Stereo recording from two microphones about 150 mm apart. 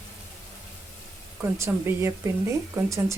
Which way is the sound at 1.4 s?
15° right (ahead or behind).